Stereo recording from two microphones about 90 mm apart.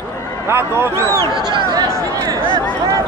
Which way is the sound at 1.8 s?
35° right (ahead or behind).